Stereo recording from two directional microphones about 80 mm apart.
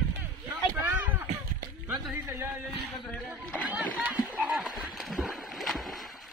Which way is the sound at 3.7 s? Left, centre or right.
Centre.